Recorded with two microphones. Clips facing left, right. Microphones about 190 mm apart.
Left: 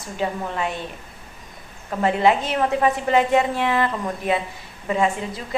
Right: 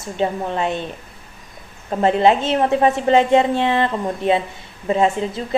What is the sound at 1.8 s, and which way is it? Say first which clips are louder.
A woman's voice: right 4 dB; 30° right (ahead or behind).